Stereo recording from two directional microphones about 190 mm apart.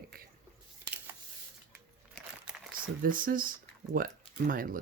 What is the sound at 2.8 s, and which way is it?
Speech, 45° right (ahead or behind).